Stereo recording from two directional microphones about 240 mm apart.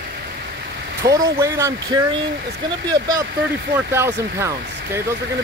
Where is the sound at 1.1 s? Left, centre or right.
Centre.